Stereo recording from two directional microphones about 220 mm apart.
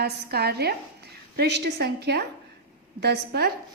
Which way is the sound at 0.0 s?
45° right (ahead or behind).